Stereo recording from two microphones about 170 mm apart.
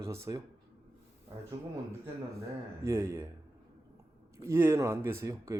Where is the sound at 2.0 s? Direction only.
15° right (ahead or behind).